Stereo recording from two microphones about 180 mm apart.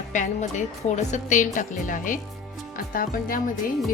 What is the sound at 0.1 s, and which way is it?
A woman's voice, 45° left (ahead or behind).